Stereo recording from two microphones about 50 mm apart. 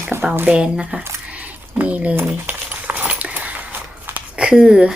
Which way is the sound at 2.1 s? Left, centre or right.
Right.